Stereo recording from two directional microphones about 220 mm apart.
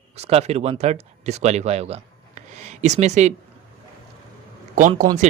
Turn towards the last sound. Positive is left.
turn(degrees=-35)  # may be behind; listen again after turning